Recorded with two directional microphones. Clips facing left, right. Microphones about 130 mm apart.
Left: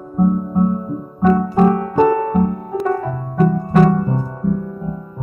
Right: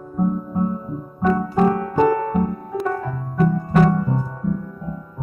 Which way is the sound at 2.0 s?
15° left (ahead or behind).